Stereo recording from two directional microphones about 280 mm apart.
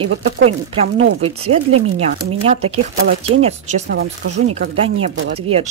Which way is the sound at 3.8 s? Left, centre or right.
Right.